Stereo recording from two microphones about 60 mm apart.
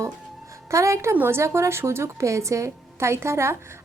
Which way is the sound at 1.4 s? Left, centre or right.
Right.